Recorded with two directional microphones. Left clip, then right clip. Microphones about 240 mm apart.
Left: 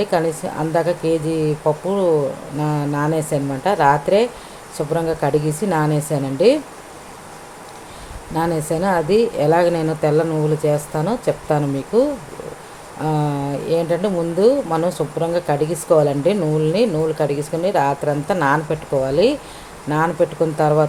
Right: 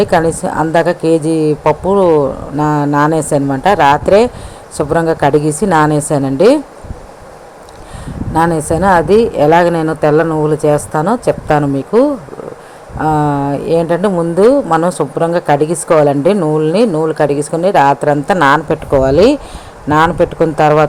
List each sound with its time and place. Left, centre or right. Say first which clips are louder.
0.0 s speech: right 8 dB; right
8.3 s speech: right 8 dB; right